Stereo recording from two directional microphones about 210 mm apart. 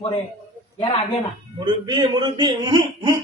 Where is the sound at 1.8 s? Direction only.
20° right (ahead or behind).